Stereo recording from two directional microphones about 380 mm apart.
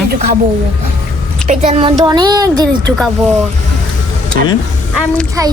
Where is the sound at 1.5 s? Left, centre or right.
Centre.